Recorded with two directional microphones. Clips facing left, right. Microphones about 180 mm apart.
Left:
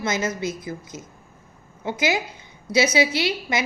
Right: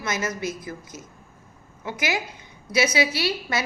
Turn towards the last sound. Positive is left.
turn(degrees=20)  # may be behind; listen again after turning